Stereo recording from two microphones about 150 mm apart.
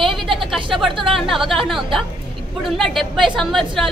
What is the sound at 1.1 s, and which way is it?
Speech, centre (ahead or behind).